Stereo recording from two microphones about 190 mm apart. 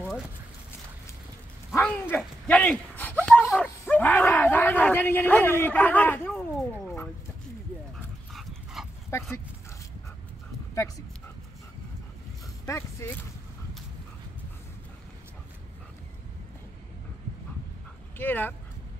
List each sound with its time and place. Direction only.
1.7 s a sound: 10° left (ahead or behind)
8.3 s dog: centre (ahead or behind)
9.1 s speech: 15° left (ahead or behind)
10.7 s speech: 15° left (ahead or behind)
12.6 s speech: 15° left (ahead or behind)
18.1 s speech: 10° left (ahead or behind)